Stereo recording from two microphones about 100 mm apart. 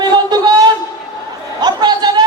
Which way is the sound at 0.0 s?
45° right (ahead or behind).